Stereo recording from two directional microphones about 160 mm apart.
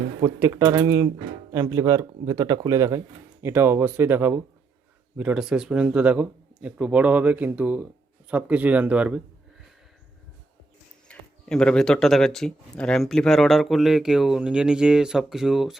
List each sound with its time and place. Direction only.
0.2 s speech: 20° right (ahead or behind)
11.1 s speech: 5° left (ahead or behind)